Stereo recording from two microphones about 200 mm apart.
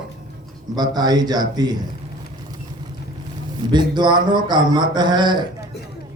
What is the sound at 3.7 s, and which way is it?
A man's voice, 20° right (ahead or behind).